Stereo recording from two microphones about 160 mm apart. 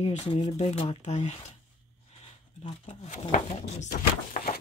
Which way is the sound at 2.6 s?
45° left (ahead or behind).